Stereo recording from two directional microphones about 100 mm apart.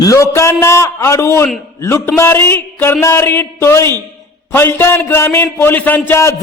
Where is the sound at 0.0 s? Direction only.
30° left (ahead or behind).